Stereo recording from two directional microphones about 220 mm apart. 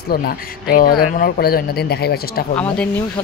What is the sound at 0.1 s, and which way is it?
Speech, 45° left (ahead or behind).